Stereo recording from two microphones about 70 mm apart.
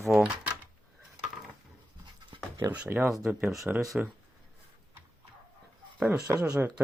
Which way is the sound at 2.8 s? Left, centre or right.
Right.